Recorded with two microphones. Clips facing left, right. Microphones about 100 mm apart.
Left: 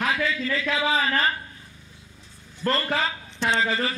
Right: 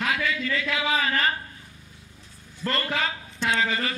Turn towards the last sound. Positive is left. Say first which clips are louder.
# left 1 dB
turn(degrees=30)  # may be behind; listen again after turning